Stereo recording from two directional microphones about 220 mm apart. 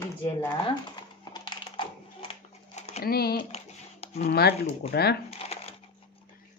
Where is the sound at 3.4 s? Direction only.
30° left (ahead or behind).